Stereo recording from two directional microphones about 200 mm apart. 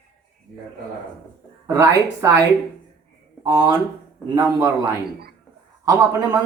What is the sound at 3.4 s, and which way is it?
Speech, 25° right (ahead or behind).